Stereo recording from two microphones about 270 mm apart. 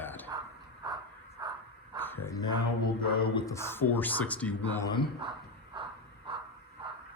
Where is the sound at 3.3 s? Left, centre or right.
Centre.